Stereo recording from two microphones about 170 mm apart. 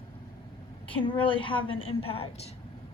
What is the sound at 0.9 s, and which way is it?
A woman's voice, 30° left (ahead or behind).